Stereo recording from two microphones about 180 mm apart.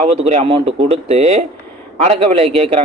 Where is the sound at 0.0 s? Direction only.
35° right (ahead or behind).